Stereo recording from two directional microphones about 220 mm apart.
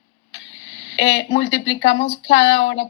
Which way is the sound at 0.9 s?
60° left (ahead or behind).